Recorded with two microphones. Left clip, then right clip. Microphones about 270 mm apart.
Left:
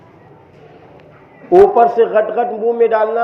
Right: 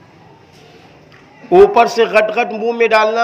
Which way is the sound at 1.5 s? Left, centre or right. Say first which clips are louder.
Even; right.